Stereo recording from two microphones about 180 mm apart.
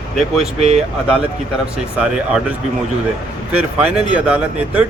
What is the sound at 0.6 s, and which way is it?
Speech, 35° right (ahead or behind).